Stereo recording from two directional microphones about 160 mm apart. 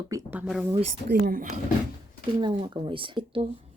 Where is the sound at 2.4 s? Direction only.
30° right (ahead or behind).